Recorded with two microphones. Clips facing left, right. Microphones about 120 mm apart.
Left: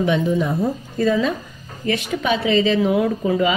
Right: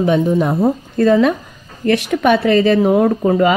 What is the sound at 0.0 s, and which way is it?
A woman's voice, 40° right (ahead or behind).